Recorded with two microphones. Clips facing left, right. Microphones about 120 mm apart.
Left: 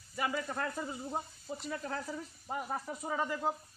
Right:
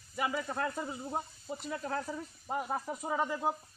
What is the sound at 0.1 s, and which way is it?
Speech, 5° right (ahead or behind).